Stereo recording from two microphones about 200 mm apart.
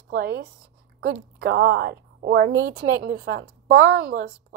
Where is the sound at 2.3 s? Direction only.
70° right (ahead or behind); by 4.2 s 90° right.